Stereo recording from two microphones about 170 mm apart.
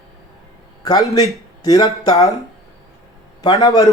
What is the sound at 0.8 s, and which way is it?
A man's voice, 25° left (ahead or behind).